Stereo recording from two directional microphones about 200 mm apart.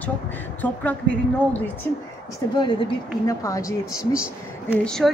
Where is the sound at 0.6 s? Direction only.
10° left (ahead or behind).